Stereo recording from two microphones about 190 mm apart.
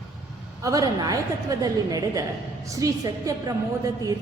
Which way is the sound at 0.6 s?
20° right (ahead or behind).